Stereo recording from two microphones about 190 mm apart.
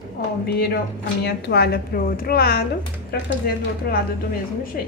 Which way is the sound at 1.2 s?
55° left (ahead or behind).